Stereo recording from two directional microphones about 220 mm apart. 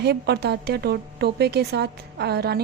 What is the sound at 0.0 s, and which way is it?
A woman's voice, 50° right (ahead or behind).